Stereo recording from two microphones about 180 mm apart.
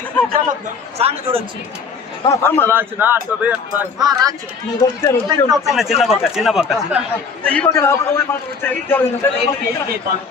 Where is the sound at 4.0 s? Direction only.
20° right (ahead or behind).